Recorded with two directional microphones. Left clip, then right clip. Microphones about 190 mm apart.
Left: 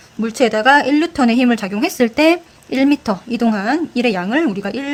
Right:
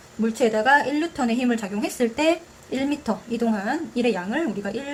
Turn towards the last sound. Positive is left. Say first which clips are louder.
# left 8 dB
turn(degrees=45)  # may be behind; listen again after turning